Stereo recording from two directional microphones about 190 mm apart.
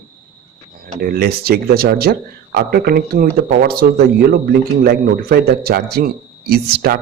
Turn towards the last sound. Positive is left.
turn(degrees=-55)  # may be behind; listen again after turning